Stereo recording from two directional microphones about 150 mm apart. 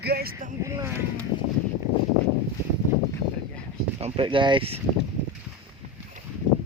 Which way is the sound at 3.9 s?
40° right (ahead or behind).